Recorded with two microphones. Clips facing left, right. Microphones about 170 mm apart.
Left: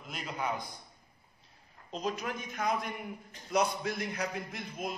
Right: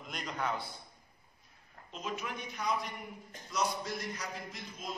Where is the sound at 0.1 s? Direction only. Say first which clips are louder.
Left 1 dB; 10° left (ahead or behind).